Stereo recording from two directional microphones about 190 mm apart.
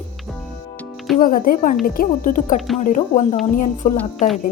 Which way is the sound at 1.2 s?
45° left (ahead or behind).